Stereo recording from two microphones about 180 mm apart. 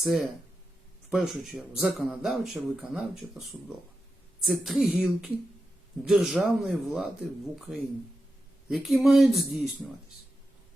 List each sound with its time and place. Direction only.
0.0 s speech: centre (ahead or behind)
4.4 s speech: centre (ahead or behind)